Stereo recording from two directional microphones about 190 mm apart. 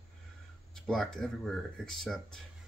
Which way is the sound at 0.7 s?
5° left (ahead or behind).